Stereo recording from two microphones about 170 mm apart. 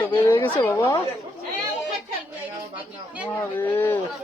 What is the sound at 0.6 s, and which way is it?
Speech, 15° left (ahead or behind).